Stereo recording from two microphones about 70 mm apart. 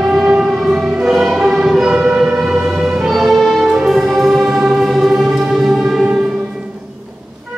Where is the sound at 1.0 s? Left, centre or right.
Centre.